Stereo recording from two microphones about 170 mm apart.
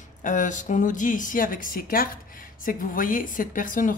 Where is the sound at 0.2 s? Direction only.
50° left (ahead or behind).